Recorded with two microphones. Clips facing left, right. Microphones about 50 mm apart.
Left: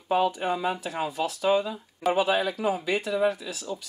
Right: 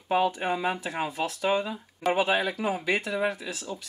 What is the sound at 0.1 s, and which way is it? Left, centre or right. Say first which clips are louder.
A man's voice: left 1 dB; centre.